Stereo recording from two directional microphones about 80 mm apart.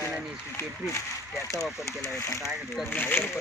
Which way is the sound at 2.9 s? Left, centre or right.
Left.